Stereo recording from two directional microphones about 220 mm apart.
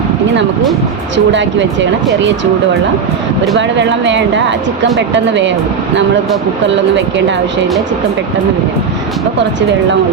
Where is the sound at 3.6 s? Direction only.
55° right (ahead or behind).